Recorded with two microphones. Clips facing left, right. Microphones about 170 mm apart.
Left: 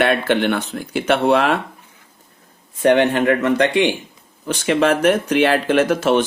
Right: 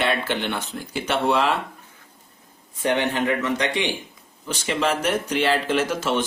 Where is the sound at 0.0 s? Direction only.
60° left (ahead or behind).